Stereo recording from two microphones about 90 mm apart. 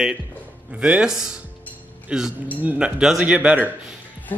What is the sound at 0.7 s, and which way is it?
A man's voice, 15° right (ahead or behind).